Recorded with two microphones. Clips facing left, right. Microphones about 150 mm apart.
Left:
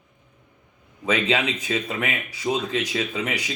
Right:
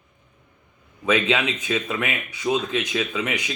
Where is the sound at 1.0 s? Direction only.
35° left (ahead or behind).